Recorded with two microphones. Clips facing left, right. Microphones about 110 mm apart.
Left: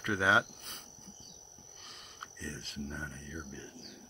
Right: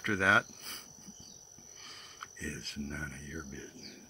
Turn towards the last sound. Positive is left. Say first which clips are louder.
# even
turn(degrees=15)  # may be behind; listen again after turning